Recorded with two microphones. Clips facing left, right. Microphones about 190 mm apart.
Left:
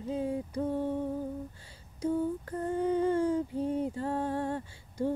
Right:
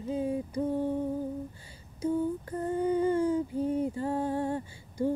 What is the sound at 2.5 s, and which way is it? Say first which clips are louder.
Humming: right 1 dB; 5° right (ahead or behind).